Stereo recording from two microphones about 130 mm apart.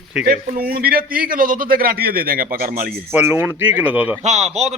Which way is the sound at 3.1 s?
15° right (ahead or behind).